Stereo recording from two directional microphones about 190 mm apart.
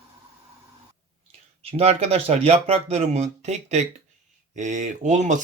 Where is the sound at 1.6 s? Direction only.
30° right (ahead or behind).